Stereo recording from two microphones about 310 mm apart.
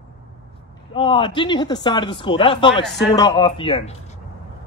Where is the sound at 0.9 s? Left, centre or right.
Centre.